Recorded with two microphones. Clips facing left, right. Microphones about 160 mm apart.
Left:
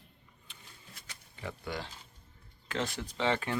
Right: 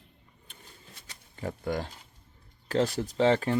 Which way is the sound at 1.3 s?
45° right (ahead or behind).